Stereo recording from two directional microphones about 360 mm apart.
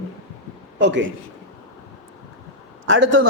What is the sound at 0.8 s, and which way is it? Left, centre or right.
Speech, right.